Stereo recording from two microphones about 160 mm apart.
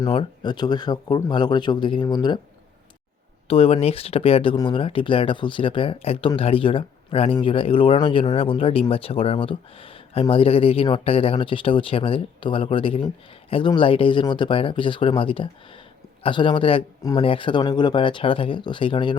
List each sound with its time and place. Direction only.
0.0 s speech: 30° left (ahead or behind)
3.4 s speech: 35° left (ahead or behind)